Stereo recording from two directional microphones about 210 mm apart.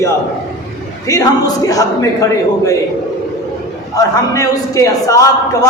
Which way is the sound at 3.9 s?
15° left (ahead or behind).